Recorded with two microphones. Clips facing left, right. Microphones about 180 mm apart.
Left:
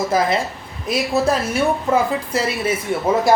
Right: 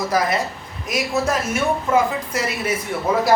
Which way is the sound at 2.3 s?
30° left (ahead or behind).